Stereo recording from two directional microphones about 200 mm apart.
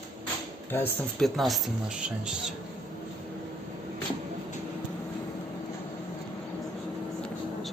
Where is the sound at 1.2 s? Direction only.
Centre (ahead or behind).